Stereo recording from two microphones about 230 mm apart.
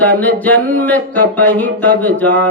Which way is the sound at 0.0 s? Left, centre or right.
Centre.